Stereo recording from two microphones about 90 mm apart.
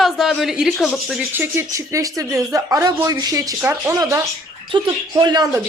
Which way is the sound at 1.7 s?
35° right (ahead or behind).